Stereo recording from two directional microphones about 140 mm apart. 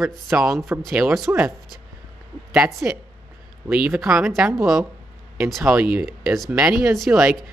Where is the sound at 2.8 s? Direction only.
10° right (ahead or behind).